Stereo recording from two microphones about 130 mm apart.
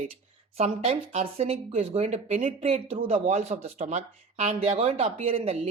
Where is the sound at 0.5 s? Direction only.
50° right (ahead or behind).